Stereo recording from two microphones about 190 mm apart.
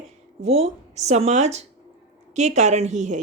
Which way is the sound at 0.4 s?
35° right (ahead or behind).